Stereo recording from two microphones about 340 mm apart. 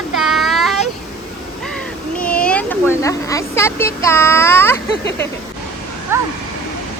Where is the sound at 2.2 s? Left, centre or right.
Centre.